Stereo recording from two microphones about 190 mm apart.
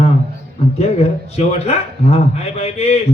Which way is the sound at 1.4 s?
35° left (ahead or behind).